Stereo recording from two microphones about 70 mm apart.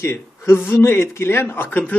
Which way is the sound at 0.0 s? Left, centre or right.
Left.